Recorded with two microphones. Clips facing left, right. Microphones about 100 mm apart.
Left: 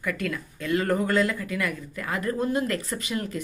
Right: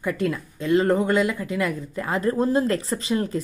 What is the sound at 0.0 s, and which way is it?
Speech, 25° right (ahead or behind).